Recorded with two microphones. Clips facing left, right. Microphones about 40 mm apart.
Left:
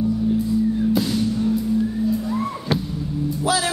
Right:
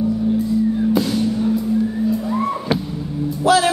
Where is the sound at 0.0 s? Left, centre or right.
Centre.